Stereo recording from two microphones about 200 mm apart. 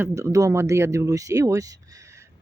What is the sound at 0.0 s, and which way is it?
Speech, 15° right (ahead or behind).